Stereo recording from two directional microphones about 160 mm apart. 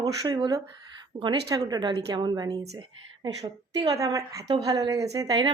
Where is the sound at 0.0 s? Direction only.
25° right (ahead or behind).